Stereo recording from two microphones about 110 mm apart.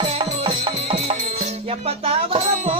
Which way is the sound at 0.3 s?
65° right (ahead or behind).